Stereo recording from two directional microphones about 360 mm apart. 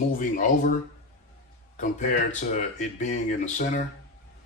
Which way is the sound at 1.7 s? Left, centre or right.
Centre.